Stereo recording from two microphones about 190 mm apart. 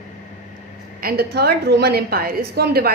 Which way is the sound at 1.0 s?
55° right (ahead or behind).